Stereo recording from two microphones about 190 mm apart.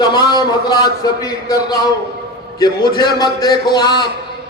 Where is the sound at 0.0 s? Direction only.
20° left (ahead or behind).